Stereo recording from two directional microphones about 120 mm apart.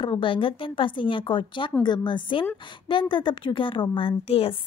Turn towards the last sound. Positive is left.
turn(degrees=50)  # may be behind; listen again after turning